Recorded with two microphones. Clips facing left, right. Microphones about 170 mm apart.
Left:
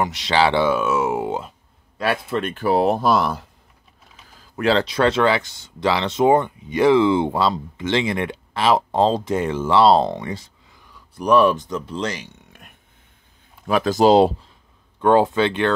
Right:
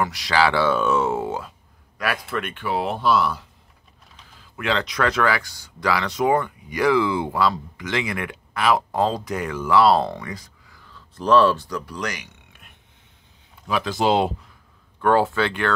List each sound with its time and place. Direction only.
0.0 s speech: 25° left (ahead or behind)
0.7 s speech: 10° left (ahead or behind); by 12.3 s 25° left (ahead or behind)
13.7 s speech: 45° left (ahead or behind)
15.0 s speech: 20° left (ahead or behind)